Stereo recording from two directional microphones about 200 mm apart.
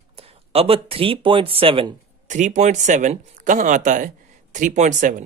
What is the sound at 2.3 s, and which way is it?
Speech, 35° right (ahead or behind).